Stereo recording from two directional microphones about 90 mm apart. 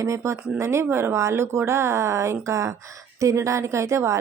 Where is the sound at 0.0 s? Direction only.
35° right (ahead or behind).